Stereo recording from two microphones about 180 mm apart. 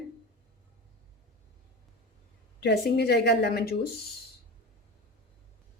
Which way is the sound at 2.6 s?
65° left (ahead or behind).